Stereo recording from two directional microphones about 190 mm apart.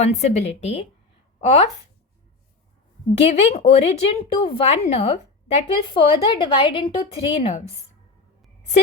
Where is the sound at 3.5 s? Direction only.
35° left (ahead or behind).